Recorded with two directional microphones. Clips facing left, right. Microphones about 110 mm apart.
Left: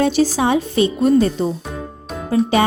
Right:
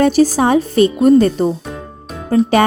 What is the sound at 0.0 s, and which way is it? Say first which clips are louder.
Speech: right 4 dB; 45° right (ahead or behind).